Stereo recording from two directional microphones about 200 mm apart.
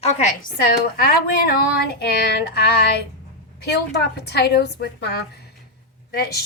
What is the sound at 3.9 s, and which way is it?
A woman's voice, 55° left (ahead or behind).